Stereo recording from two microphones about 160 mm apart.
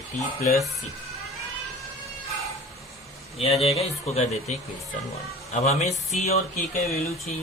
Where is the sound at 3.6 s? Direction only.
40° left (ahead or behind).